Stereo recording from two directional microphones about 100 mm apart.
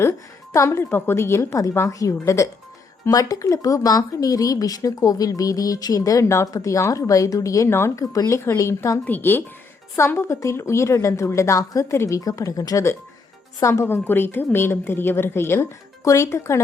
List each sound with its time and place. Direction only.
0.5 s a woman's voice: 30° left (ahead or behind)
9.0 s a woman's voice: 20° left (ahead or behind)